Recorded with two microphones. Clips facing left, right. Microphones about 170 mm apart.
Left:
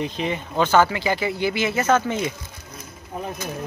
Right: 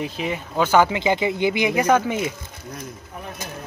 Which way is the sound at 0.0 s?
5° right (ahead or behind).